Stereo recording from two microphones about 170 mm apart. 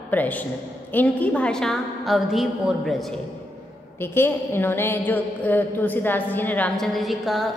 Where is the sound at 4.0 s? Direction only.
15° left (ahead or behind).